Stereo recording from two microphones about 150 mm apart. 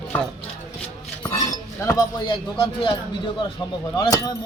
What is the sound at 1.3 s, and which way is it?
Speech, 20° left (ahead or behind).